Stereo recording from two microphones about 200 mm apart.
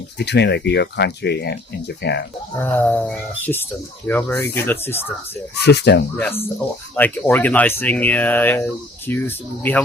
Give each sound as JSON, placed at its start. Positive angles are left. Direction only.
{"t": 0.2, "sound": "speech", "side_deg": 55}
{"t": 2.6, "sound": "speech", "side_deg": 10}
{"t": 5.5, "sound": "speech", "side_deg": 55}
{"t": 6.1, "sound": "speech", "side_deg": 10}